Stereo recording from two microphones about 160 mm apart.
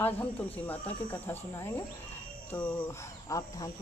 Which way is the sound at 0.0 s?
10° left (ahead or behind).